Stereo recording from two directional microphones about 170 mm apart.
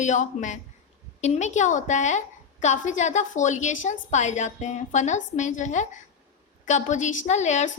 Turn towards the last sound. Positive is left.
turn(degrees=45)  # may be behind; listen again after turning